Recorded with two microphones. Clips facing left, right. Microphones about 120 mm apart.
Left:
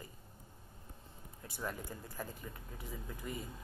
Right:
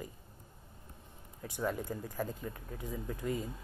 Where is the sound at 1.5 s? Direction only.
15° right (ahead or behind).